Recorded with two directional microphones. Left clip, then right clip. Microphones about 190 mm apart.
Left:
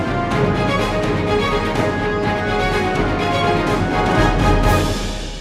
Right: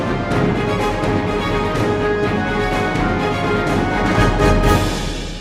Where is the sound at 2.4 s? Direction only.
Centre (ahead or behind).